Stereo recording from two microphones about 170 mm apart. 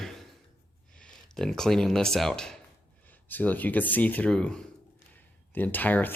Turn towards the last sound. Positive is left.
turn(degrees=10)  # may be behind; listen again after turning